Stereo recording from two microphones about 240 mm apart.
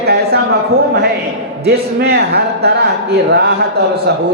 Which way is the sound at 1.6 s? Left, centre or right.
Right.